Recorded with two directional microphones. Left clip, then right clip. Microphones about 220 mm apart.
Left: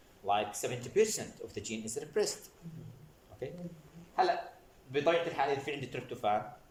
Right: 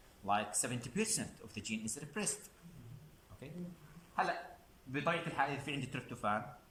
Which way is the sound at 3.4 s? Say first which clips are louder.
Left 12 dB; 30° left (ahead or behind).